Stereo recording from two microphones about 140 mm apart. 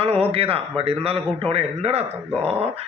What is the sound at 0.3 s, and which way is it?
A man's voice, 40° right (ahead or behind).